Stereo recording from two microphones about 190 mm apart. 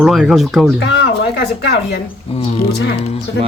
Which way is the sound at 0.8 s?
75° left (ahead or behind).